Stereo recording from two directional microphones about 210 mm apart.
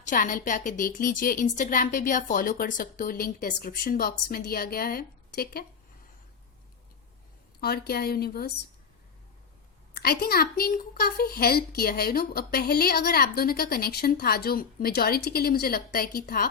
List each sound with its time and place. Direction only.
0.0 s a woman's voice: 40° left (ahead or behind)
7.6 s a woman's voice: 50° left (ahead or behind)
9.9 s a woman's voice: 45° left (ahead or behind)